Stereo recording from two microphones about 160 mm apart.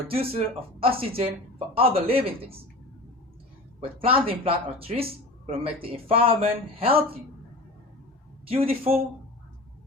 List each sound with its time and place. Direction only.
0.1 s speech: 35° right (ahead or behind)
3.8 s speech: 35° right (ahead or behind)
8.4 s speech: 40° right (ahead or behind)